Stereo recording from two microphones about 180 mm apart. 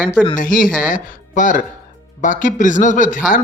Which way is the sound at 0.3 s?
50° left (ahead or behind).